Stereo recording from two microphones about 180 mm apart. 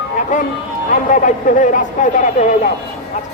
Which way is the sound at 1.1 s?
45° left (ahead or behind).